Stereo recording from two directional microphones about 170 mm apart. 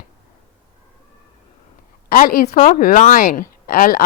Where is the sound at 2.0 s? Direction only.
60° left (ahead or behind).